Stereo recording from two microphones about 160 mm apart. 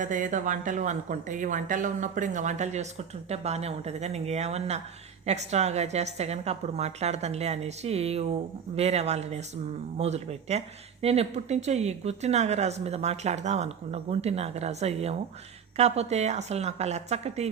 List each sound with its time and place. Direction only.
0.0 s a woman's voice: 55° right (ahead or behind)